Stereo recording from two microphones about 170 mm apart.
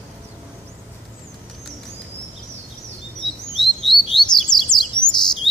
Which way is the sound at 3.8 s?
Centre (ahead or behind).